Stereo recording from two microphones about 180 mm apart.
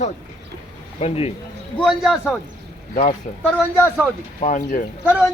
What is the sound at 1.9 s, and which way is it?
Speech, centre (ahead or behind).